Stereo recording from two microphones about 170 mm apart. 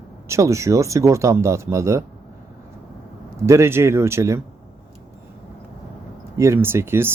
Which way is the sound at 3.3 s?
15° right (ahead or behind).